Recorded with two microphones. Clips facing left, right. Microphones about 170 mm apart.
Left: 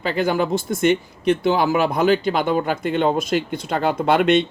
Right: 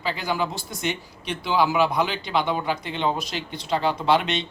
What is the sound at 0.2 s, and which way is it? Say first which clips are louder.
Speech: left 7 dB; 50° left (ahead or behind).